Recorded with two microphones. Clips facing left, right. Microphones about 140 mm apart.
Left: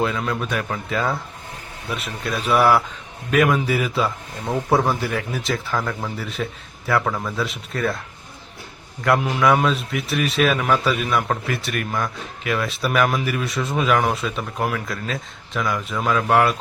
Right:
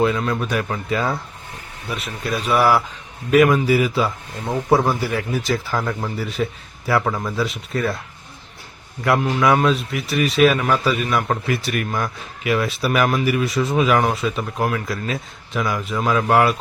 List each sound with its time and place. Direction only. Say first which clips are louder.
0.0 s a man's voice: right 3 dB; centre (ahead or behind)
9.0 s a man's voice: right 1 dB; centre (ahead or behind)